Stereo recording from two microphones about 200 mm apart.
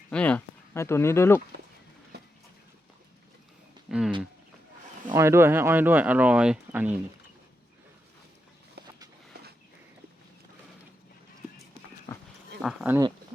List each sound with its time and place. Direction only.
0.1 s a sound: 5° left (ahead or behind)
3.8 s a sound: 5° right (ahead or behind)
5.0 s speech: 15° right (ahead or behind)
8.8 s vehicle: 55° right (ahead or behind)
12.1 s livestock: 20° left (ahead or behind)
12.6 s speech: 10° right (ahead or behind)